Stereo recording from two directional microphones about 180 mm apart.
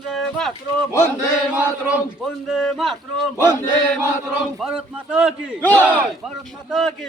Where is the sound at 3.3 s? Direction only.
15° left (ahead or behind).